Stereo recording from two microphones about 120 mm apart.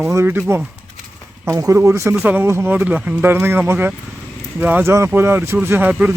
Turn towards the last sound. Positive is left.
turn(degrees=-15)  # may be behind; listen again after turning